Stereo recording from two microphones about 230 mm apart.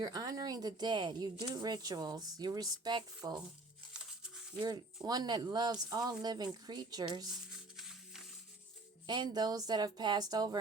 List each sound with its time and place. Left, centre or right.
0.0 s speech: centre
5.0 s speech: centre
7.8 s music: centre
9.0 s speech: centre